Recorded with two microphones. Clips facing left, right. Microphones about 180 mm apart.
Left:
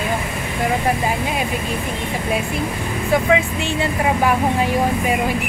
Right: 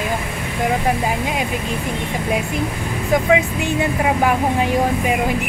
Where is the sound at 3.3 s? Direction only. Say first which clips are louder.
Right 2 dB; 15° right (ahead or behind).